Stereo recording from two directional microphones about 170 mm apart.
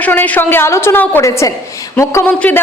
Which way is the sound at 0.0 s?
10° left (ahead or behind).